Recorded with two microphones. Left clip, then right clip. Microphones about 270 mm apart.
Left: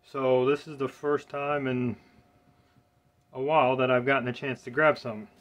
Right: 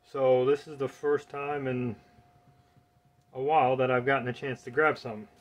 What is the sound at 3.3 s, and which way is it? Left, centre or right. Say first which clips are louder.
Speech: left 1 dB; centre.